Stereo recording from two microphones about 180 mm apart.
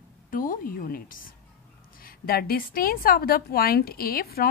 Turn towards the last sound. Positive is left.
turn(degrees=60)  # may be behind; listen again after turning